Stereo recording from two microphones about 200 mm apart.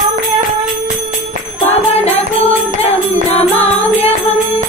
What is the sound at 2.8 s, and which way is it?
Music, 30° left (ahead or behind).